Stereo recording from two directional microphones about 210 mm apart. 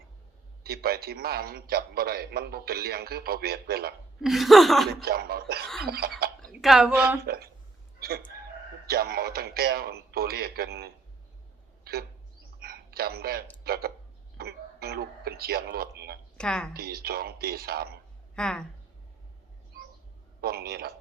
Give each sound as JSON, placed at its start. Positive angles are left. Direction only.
{"t": 0.6, "sound": "a man's voice", "side_deg": -45}
{"t": 4.2, "sound": "a woman's voice", "side_deg": 0}
{"t": 4.9, "sound": "a man's voice", "side_deg": -45}
{"t": 6.4, "sound": "a woman's voice", "side_deg": 0}
{"t": 7.2, "sound": "a man's voice", "side_deg": -45}
{"t": 7.9, "sound": "a sound", "side_deg": -45}
{"t": 8.9, "sound": "a man's voice", "side_deg": -45}
{"t": 11.9, "sound": "bird", "side_deg": -45}
{"t": 12.6, "sound": "a sound", "side_deg": -45}
{"t": 13.7, "sound": "a man's voice", "side_deg": -45}
{"t": 16.4, "sound": "a woman's voice", "side_deg": 5}
{"t": 16.7, "sound": "a man's voice", "side_deg": -45}
{"t": 18.3, "sound": "a woman's voice", "side_deg": 5}
{"t": 20.4, "sound": "a man's voice", "side_deg": -45}